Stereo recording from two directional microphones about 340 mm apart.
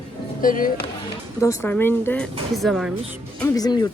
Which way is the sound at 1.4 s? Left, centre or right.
Centre.